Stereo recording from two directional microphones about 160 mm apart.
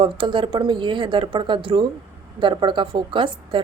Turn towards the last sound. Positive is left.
turn(degrees=-30)  # may be behind; listen again after turning